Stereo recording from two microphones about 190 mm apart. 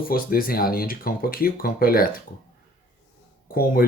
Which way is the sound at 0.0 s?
50° left (ahead or behind).